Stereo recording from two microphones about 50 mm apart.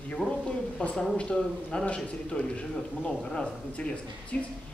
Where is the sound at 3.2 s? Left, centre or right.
Centre.